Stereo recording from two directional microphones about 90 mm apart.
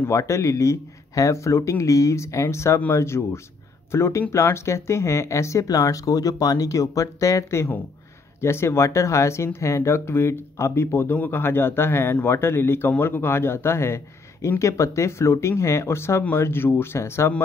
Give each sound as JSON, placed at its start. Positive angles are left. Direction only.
{"t": 0.0, "sound": "speech", "side_deg": 35}